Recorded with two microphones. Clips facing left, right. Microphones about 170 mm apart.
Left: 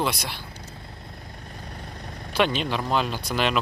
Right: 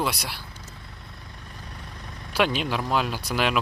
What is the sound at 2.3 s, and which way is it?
Speech, 5° right (ahead or behind).